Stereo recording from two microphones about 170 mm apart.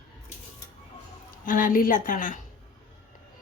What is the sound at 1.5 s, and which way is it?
Speech, 55° left (ahead or behind).